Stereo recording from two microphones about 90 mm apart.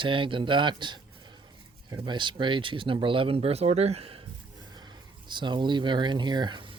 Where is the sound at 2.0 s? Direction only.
65° right (ahead or behind); by 3.5 s 90° right.